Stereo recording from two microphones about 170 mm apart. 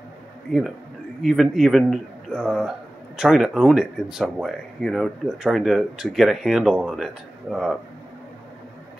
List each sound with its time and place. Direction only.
0.5 s speech: centre (ahead or behind)